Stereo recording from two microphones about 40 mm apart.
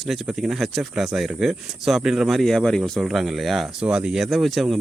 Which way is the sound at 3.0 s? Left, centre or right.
Centre.